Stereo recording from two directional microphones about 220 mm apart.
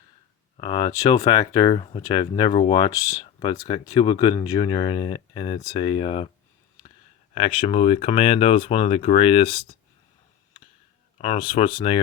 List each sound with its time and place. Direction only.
0.5 s speech: 20° left (ahead or behind)
7.3 s speech: 25° left (ahead or behind)
11.2 s speech: 25° left (ahead or behind)